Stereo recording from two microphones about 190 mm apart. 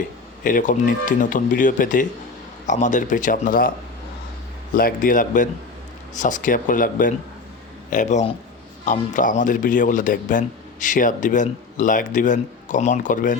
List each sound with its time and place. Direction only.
0.4 s a man's voice: 45° left (ahead or behind)
4.7 s a man's voice: 45° left (ahead or behind)